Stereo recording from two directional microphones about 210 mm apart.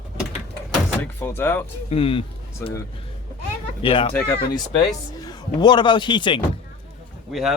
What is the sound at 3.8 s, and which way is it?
Speech, 25° left (ahead or behind).